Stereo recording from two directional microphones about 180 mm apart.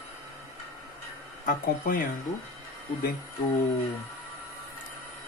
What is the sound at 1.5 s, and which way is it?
Speech, 50° left (ahead or behind).